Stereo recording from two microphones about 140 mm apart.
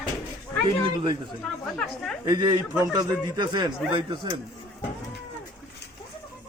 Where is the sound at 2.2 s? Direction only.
30° right (ahead or behind).